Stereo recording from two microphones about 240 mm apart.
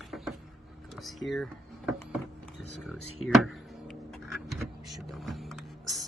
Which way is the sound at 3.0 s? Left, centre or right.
Left.